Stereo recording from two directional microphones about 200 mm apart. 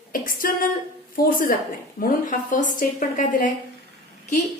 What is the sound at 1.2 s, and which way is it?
A woman's voice, 45° left (ahead or behind).